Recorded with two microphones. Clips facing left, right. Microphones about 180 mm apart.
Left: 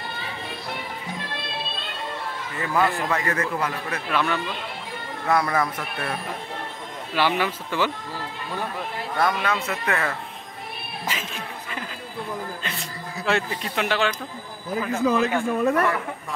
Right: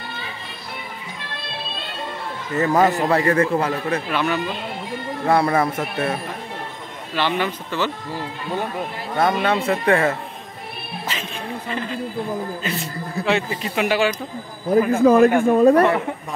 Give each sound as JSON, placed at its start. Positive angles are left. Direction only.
{"t": 2.5, "sound": "a man's voice", "side_deg": -40}
{"t": 4.1, "sound": "speech", "side_deg": -5}
{"t": 5.2, "sound": "a man's voice", "side_deg": -30}
{"t": 7.2, "sound": "speech", "side_deg": 10}
{"t": 9.2, "sound": "a man's voice", "side_deg": -25}
{"t": 11.1, "sound": "speech", "side_deg": 10}
{"t": 13.2, "sound": "speech", "side_deg": -5}
{"t": 15.0, "sound": "speech", "side_deg": -50}
{"t": 15.5, "sound": "a man's voice", "side_deg": -35}